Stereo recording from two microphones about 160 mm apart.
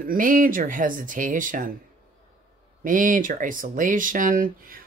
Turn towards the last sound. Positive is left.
turn(degrees=-60)  # may be behind; listen again after turning